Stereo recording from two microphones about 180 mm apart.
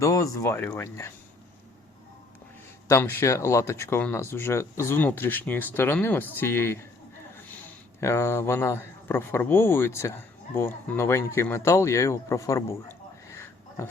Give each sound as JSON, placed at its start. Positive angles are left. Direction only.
{"t": 0.0, "sound": "speech", "side_deg": 20}
{"t": 2.8, "sound": "speech", "side_deg": 15}
{"t": 8.0, "sound": "speech", "side_deg": 15}